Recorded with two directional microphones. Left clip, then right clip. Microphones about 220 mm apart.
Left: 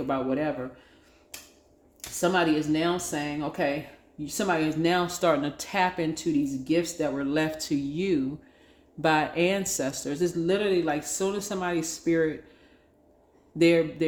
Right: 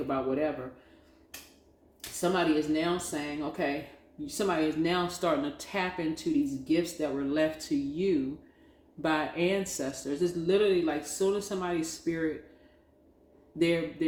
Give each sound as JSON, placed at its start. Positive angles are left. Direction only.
{"t": 0.1, "sound": "speech", "side_deg": 45}
{"t": 2.2, "sound": "speech", "side_deg": 45}
{"t": 13.6, "sound": "speech", "side_deg": 45}